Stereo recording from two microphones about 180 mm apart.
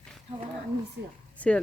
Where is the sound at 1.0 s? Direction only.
70° right (ahead or behind).